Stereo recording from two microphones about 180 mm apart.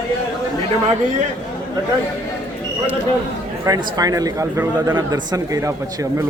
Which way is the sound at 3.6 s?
20° right (ahead or behind).